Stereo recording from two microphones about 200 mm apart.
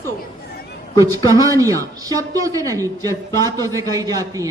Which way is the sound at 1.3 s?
15° right (ahead or behind).